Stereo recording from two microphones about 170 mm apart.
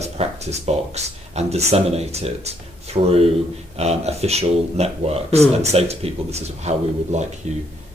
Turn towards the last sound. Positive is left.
turn(degrees=-45)  # may be behind; listen again after turning